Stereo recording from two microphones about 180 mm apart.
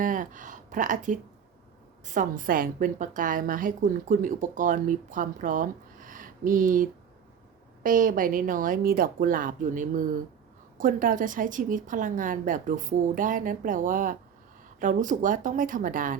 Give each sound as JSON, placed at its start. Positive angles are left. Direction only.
{"t": 0.0, "sound": "a woman's voice", "side_deg": -45}
{"t": 7.9, "sound": "a woman's voice", "side_deg": -50}